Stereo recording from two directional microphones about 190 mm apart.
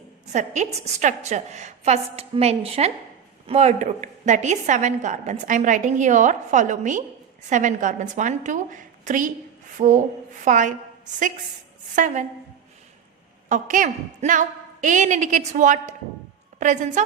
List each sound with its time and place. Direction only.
0.3 s a woman's voice: 40° right (ahead or behind)
13.5 s a woman's voice: 45° right (ahead or behind)